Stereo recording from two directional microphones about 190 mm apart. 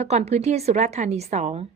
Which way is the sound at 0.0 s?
35° right (ahead or behind).